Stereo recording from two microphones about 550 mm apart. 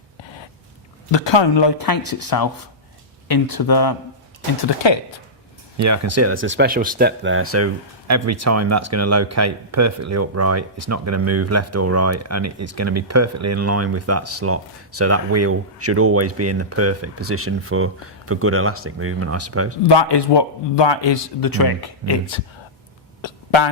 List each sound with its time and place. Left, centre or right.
1.1 s speech: left
4.8 s speech: left
5.7 s speech: right
19.9 s speech: left
21.4 s speech: left
23.2 s a sound: left